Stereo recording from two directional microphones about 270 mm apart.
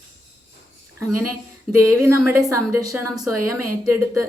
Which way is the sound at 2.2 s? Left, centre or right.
Centre.